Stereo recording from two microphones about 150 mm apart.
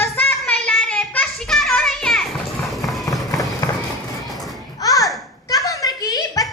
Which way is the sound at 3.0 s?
25° left (ahead or behind).